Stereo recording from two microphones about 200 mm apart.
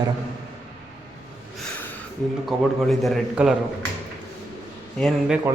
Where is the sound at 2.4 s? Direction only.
Centre (ahead or behind).